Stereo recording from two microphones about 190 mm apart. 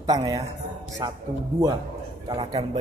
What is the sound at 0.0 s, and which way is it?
Speech, 20° right (ahead or behind).